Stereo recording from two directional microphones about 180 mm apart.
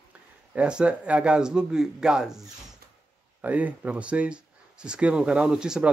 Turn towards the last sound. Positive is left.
turn(degrees=-5)  # may be behind; listen again after turning